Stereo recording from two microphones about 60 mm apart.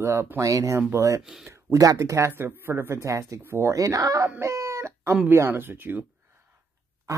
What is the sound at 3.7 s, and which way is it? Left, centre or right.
Speech, right.